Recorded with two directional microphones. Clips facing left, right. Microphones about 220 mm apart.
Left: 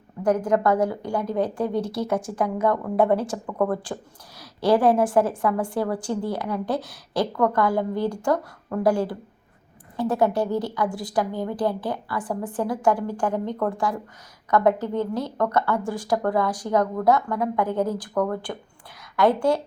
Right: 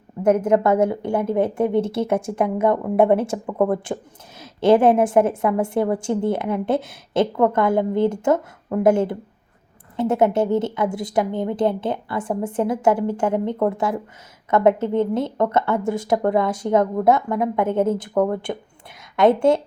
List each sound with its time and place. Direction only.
0.2 s a woman's voice: 20° right (ahead or behind)